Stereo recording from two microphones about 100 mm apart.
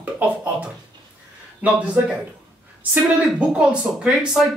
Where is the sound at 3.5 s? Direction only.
10° right (ahead or behind).